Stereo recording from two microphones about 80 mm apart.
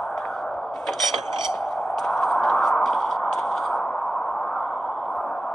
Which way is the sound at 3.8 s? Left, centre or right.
Centre.